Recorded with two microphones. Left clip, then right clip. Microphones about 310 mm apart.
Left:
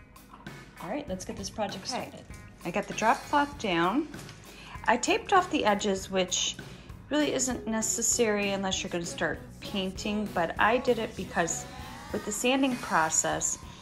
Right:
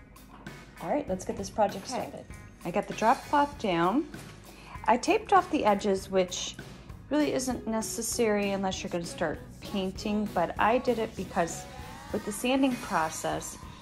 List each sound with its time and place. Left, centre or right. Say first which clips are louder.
0.7 s a woman's voice: right 5 dB; centre
7.1 s a woman's voice: even; centre